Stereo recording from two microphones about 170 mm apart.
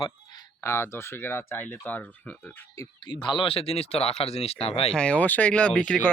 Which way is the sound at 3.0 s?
30° left (ahead or behind).